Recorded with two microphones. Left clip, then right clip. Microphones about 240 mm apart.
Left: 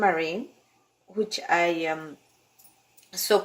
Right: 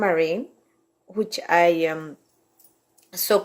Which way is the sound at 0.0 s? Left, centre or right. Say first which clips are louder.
Right 3 dB; right.